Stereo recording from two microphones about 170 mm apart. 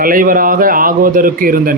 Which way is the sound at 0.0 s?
55° right (ahead or behind).